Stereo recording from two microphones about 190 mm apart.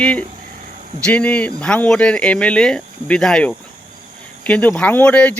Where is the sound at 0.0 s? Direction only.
5° left (ahead or behind).